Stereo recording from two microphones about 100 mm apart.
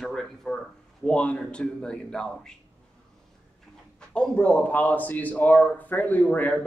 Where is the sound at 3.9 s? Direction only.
10° left (ahead or behind).